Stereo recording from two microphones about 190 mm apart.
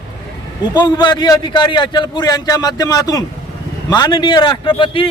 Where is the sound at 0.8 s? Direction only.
20° left (ahead or behind).